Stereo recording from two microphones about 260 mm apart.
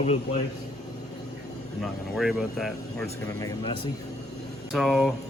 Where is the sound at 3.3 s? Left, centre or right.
Centre.